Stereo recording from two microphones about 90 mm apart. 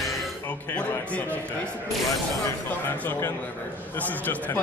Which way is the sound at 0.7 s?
15° left (ahead or behind).